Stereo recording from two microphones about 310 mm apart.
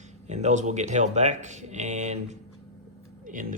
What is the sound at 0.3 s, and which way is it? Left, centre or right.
Speech, right.